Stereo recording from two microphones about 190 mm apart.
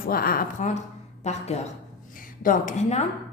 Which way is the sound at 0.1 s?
50° left (ahead or behind).